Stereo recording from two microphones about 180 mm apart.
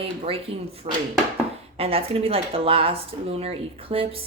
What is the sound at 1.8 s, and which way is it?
A woman's voice, 35° right (ahead or behind).